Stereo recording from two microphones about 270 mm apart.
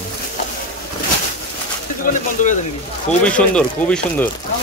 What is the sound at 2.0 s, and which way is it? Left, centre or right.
Speech, left.